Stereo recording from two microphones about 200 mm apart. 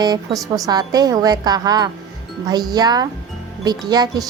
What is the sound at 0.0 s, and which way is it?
A woman's voice, 20° right (ahead or behind).